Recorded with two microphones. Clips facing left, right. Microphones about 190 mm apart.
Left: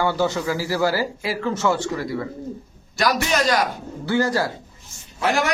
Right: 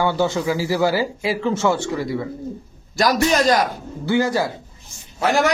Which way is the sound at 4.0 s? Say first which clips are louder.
Right 2 dB; 20° right (ahead or behind).